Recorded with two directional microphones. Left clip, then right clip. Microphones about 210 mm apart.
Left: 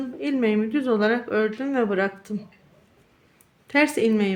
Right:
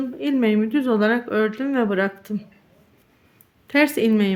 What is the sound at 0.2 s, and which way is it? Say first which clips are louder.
A woman's voice: right 2 dB; 10° right (ahead or behind).